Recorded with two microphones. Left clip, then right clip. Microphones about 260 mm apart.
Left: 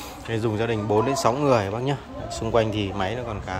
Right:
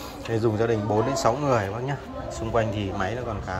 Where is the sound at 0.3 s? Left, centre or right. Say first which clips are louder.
Right 2 dB; centre.